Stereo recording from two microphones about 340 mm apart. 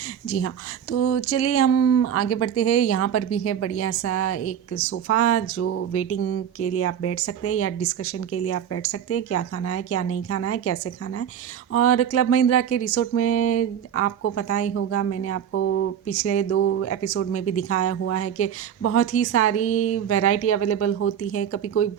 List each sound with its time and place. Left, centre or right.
0.3 s a woman's voice: left
19.5 s a woman's voice: left
20.1 s a woman's voice: left